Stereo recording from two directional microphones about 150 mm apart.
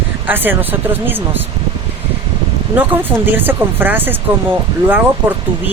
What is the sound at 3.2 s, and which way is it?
Speech, 15° right (ahead or behind).